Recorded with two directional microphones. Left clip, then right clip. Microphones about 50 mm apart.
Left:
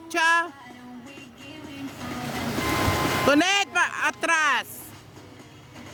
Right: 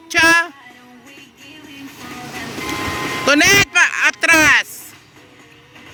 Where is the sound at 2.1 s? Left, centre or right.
Left.